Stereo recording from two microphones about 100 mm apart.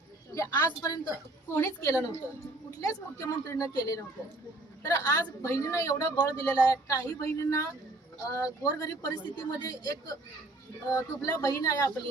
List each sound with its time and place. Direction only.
0.3 s a woman's voice: 35° left (ahead or behind)